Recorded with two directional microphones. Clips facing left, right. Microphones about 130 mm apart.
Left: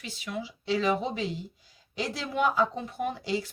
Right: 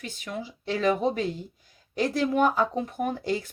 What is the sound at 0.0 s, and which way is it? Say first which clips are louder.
Speech: right 1 dB; 45° right (ahead or behind).